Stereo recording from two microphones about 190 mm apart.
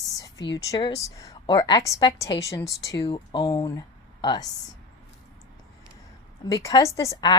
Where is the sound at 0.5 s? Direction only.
20° left (ahead or behind).